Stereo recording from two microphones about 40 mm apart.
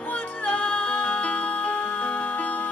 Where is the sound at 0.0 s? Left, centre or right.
Left.